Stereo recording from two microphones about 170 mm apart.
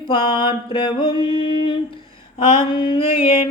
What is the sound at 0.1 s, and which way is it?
Music, 30° left (ahead or behind).